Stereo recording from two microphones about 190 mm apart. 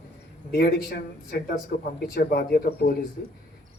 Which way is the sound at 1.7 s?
45° left (ahead or behind).